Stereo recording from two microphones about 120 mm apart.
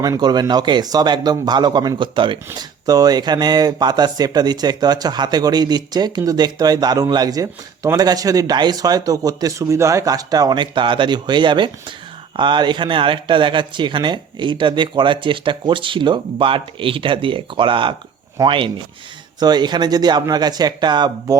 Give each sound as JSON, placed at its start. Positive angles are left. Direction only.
{"t": 0.0, "sound": "speech", "side_deg": -30}
{"t": 2.6, "sound": "speech", "side_deg": -30}